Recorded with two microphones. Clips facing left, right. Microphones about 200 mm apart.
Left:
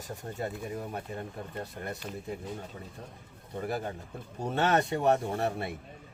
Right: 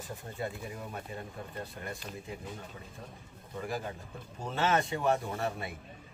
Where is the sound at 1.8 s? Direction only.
35° left (ahead or behind).